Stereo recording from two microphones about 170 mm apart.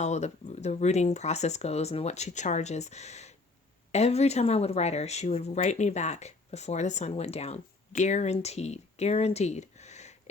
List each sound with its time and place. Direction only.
0.0 s speech: 40° left (ahead or behind)